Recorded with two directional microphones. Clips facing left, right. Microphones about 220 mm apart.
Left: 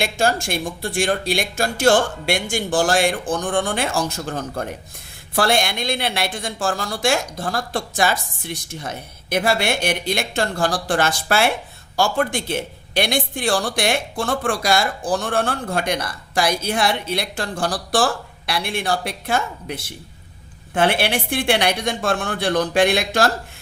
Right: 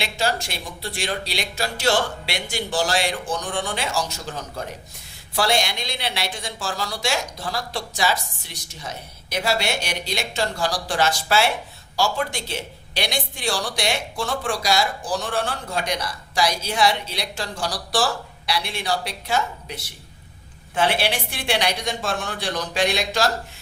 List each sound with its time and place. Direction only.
0.0 s a man's voice: 50° left (ahead or behind)